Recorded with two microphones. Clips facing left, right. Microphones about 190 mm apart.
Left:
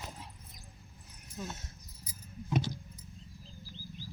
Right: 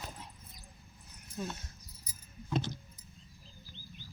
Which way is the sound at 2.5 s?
10° left (ahead or behind).